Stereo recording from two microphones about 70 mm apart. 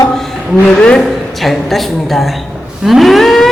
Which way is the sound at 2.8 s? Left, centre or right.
Centre.